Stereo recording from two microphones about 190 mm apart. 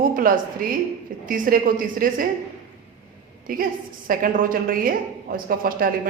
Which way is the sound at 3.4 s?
45° right (ahead or behind).